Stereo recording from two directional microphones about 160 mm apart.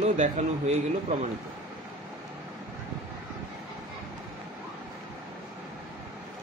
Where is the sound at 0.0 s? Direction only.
45° right (ahead or behind).